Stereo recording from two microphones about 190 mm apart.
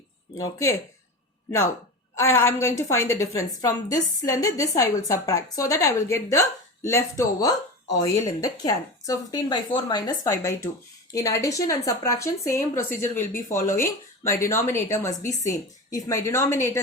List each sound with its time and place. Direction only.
0.3 s a woman's voice: 15° left (ahead or behind)